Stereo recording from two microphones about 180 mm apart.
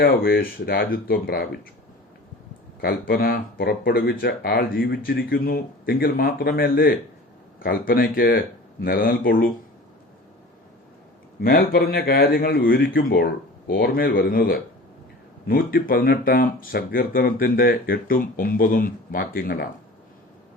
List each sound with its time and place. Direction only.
0.0 s speech: 55° left (ahead or behind)
2.8 s speech: 55° left (ahead or behind)
11.3 s speech: 60° left (ahead or behind)